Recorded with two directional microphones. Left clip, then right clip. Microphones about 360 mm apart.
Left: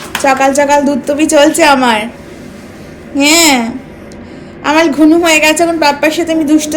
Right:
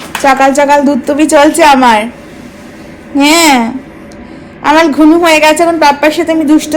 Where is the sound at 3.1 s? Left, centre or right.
Centre.